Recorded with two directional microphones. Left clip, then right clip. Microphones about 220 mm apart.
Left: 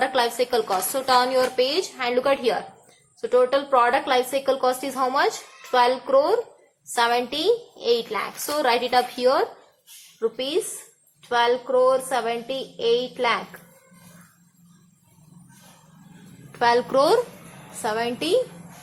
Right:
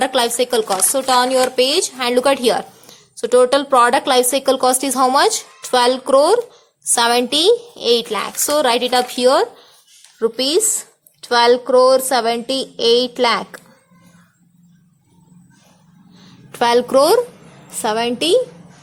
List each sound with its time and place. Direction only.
0.0 s speech: 45° right (ahead or behind)
16.5 s a woman's voice: 50° right (ahead or behind)